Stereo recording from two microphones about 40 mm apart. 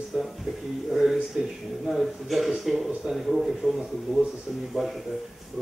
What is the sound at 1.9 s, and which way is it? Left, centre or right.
Speech, centre.